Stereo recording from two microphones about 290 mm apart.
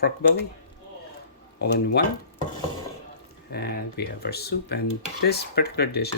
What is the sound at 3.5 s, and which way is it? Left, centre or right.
Speech, left.